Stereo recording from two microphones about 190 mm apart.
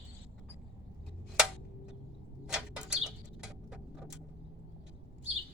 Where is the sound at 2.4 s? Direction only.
5° right (ahead or behind).